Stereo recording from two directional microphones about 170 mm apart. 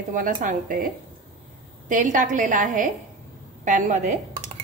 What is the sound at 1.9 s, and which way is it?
A woman's voice, 50° right (ahead or behind).